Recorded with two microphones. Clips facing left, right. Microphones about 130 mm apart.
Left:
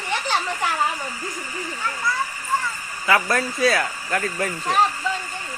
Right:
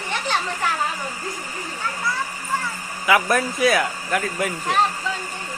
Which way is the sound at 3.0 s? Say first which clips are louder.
Right 2 dB; 15° right (ahead or behind).